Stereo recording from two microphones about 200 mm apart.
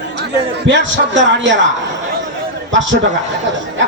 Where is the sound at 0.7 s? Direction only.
65° right (ahead or behind).